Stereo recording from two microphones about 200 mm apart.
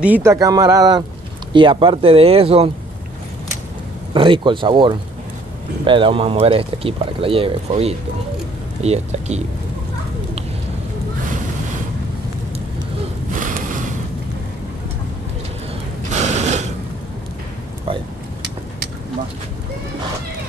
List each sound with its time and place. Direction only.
0.0 s speech: 10° right (ahead or behind); by 2.7 s 30° right (ahead or behind)
4.1 s speech: 25° right (ahead or behind)
13.3 s a sound: 40° right (ahead or behind)
16.1 s mechanisms: 35° right (ahead or behind)